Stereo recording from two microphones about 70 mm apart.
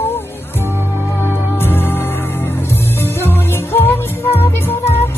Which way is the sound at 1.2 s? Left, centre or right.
Left.